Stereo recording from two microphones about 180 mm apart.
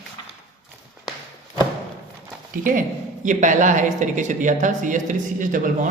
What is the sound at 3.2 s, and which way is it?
A woman's voice, 45° right (ahead or behind).